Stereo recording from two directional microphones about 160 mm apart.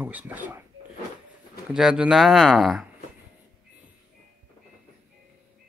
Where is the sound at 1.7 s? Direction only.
5° right (ahead or behind).